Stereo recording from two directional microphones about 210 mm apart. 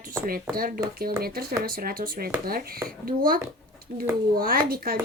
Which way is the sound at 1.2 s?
45° right (ahead or behind).